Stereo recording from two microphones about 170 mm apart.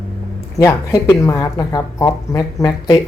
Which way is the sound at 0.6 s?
15° left (ahead or behind).